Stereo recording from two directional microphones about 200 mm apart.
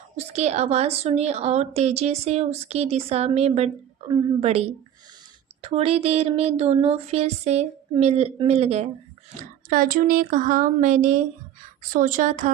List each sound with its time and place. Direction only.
0.2 s a woman's voice: 35° right (ahead or behind)
9.6 s a woman's voice: 45° right (ahead or behind)